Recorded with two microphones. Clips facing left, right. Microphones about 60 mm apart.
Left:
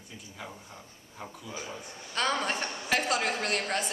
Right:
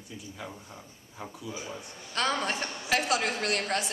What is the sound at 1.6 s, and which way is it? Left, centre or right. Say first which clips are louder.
A woman's voice: even; centre.